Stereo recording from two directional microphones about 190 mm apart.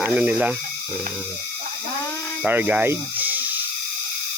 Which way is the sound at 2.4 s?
10° right (ahead or behind).